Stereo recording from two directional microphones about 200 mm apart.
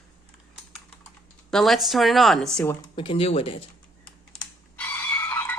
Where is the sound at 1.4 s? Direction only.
Centre (ahead or behind).